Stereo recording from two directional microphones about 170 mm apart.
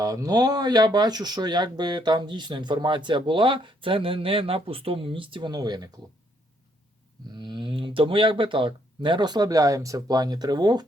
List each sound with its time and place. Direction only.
0.0 s speech: 20° right (ahead or behind)
7.3 s speech: 25° right (ahead or behind)